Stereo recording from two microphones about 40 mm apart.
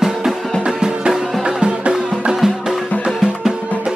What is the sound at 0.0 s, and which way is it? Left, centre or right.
Music, centre.